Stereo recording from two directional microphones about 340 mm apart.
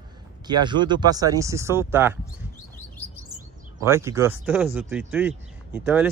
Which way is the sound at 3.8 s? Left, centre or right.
Centre.